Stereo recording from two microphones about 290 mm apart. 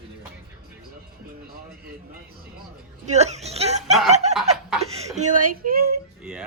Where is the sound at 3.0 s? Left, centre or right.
Right.